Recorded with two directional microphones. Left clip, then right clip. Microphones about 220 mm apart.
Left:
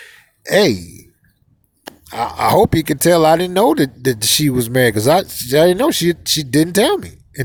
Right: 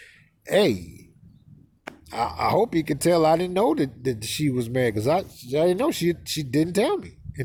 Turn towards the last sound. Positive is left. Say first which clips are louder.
# left 8 dB
turn(degrees=20)  # may be behind; listen again after turning